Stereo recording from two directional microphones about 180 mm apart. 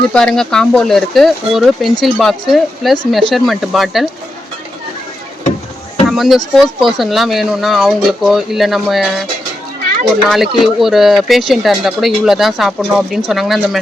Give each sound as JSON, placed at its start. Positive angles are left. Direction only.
{"t": 0.1, "sound": "speech", "side_deg": 5}
{"t": 6.1, "sound": "speech", "side_deg": 0}
{"t": 10.2, "sound": "speech", "side_deg": 0}